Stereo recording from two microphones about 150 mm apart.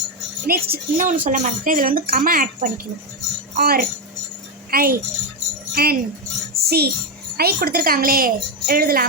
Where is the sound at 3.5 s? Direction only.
90° right.